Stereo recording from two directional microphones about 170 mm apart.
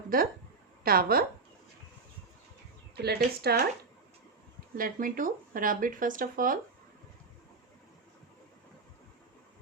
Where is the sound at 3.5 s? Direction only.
65° right (ahead or behind).